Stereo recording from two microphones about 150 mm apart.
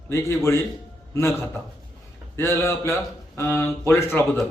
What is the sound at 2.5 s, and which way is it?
A man's voice, 20° left (ahead or behind).